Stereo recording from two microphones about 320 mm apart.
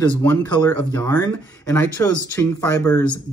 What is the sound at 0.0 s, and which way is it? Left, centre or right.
Speech, centre.